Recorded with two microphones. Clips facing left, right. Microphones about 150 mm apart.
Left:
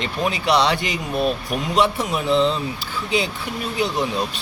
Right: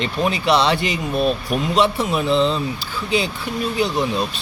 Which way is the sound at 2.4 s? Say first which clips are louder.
Left 1 dB; 20° right (ahead or behind).